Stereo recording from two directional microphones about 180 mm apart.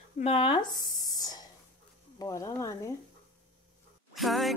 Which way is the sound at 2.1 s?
20° left (ahead or behind).